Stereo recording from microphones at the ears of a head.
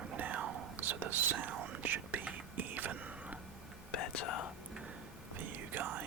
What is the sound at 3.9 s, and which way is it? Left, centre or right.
Whispering, left.